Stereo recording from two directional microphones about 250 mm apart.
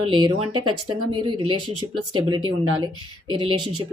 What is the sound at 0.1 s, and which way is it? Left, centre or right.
A woman's voice, centre.